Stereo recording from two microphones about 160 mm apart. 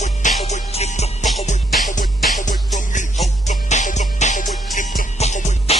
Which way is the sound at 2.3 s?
50° left (ahead or behind).